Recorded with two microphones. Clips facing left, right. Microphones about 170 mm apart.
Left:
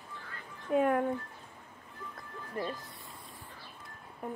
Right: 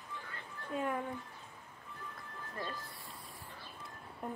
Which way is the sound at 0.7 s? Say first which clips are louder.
Left 9 dB; 60° left (ahead or behind).